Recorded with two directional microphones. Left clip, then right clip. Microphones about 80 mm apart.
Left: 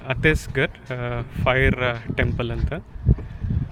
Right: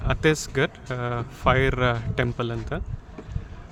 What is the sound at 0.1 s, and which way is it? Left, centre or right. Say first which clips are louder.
Speech: left 2 dB; centre.